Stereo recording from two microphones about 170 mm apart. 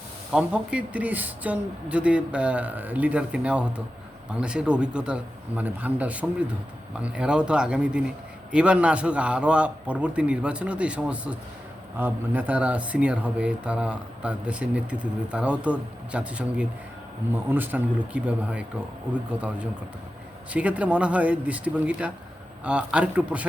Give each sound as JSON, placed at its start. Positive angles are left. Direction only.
{"t": 0.3, "sound": "a man's voice", "side_deg": -5}